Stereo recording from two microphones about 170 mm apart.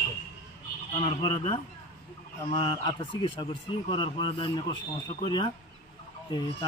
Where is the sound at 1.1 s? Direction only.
25° left (ahead or behind).